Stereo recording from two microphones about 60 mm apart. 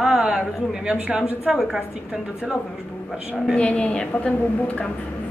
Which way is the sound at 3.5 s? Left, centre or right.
Centre.